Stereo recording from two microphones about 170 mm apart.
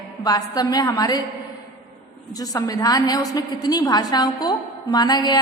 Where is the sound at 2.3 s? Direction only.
20° left (ahead or behind).